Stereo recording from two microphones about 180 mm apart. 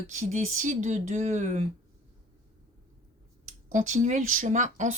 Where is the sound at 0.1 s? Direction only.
40° right (ahead or behind).